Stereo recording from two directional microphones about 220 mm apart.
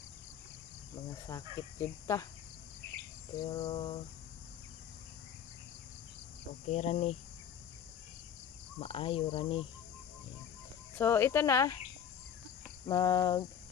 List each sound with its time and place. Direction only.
1.3 s speech: 15° left (ahead or behind)
3.3 s speech: 20° left (ahead or behind)
6.7 s cricket: 30° left (ahead or behind)
8.7 s speech: 25° left (ahead or behind)
11.0 s speech: 10° left (ahead or behind)
12.8 s speech: 15° left (ahead or behind)